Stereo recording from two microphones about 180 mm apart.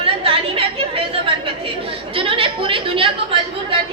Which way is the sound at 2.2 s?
30° right (ahead or behind).